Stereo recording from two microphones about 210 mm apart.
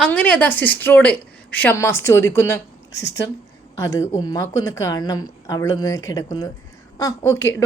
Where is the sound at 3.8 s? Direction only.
15° left (ahead or behind).